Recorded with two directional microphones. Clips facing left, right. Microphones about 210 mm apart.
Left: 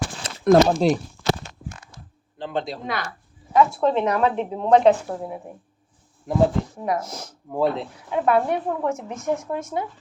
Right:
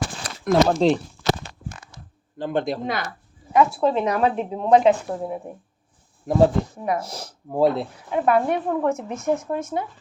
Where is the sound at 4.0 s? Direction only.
10° right (ahead or behind).